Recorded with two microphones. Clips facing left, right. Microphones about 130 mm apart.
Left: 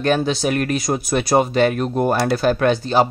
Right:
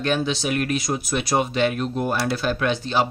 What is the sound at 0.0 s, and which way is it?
Speech, 45° left (ahead or behind).